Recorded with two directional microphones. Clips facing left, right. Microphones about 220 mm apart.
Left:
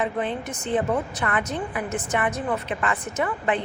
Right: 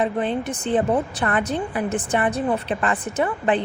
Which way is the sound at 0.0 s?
35° right (ahead or behind).